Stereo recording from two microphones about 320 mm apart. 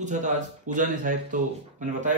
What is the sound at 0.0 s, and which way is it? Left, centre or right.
A man's voice, right.